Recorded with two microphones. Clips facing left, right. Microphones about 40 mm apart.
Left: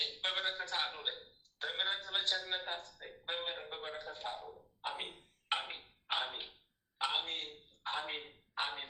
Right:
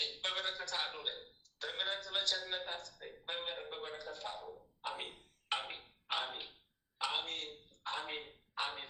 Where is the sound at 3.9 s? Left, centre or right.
Left.